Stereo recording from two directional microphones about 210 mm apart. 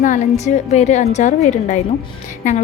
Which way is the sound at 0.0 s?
35° left (ahead or behind).